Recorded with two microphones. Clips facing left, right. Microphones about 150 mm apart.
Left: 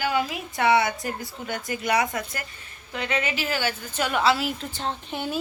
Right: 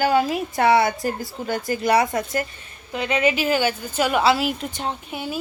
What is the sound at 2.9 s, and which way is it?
A woman's voice, 20° right (ahead or behind).